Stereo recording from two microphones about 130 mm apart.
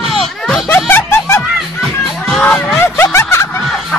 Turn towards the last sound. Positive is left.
turn(degrees=20)  # may be behind; listen again after turning